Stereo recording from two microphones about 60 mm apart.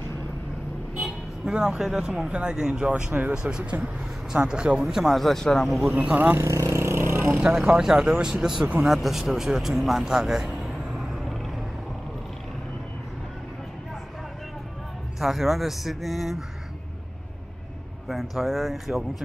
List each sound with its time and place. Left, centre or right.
0.9 s vehicle: centre
1.5 s speech: centre
4.3 s speech: centre
4.8 s speech: centre
5.9 s speech: right
6.3 s speech: right
6.7 s vehicle: right
7.3 s speech: centre
15.1 s speech: centre
18.0 s speech: centre